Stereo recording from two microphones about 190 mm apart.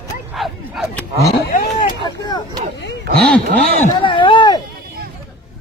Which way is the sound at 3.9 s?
25° left (ahead or behind).